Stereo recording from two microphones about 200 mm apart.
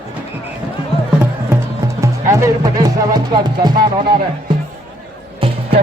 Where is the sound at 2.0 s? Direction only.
15° right (ahead or behind).